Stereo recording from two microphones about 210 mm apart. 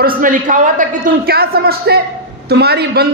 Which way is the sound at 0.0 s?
40° right (ahead or behind).